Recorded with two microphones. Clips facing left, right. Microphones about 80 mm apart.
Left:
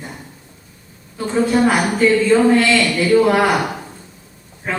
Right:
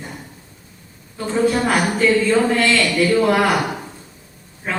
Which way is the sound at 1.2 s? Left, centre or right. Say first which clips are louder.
Left 2 dB; centre.